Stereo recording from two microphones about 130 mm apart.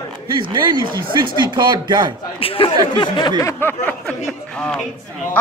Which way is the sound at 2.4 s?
45° left (ahead or behind).